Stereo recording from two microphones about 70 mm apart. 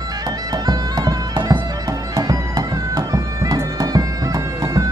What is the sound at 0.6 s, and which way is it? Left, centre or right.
Bagpipes, right.